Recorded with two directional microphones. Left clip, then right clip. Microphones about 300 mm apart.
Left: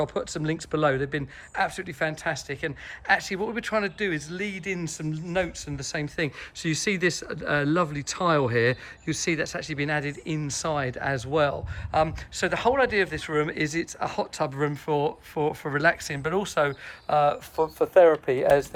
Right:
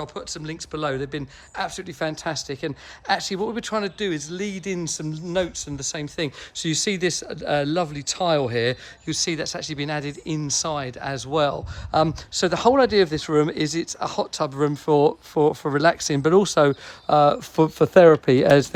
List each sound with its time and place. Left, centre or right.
0.0 s speech: centre
17.6 s speech: right